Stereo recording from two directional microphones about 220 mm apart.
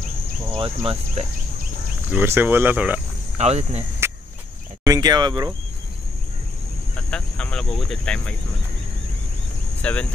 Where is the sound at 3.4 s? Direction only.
30° right (ahead or behind).